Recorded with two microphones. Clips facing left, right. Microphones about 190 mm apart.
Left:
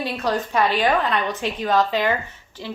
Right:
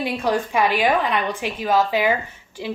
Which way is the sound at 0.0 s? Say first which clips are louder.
Right 2 dB; 10° right (ahead or behind).